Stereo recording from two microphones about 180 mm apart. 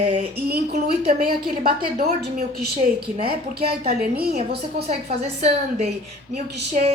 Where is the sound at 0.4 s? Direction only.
60° right (ahead or behind).